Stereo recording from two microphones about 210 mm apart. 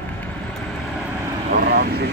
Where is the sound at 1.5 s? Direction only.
50° right (ahead or behind).